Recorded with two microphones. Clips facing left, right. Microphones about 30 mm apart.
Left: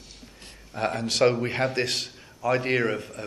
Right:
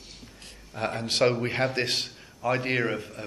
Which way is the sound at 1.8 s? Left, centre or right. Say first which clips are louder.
Left 1 dB; right.